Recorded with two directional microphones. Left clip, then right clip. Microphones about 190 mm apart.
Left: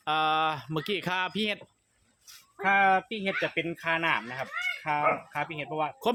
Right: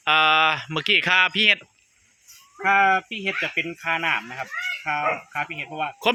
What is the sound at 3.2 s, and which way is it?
Speech, 25° left (ahead or behind).